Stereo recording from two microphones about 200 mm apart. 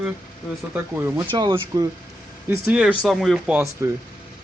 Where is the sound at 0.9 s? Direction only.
10° right (ahead or behind).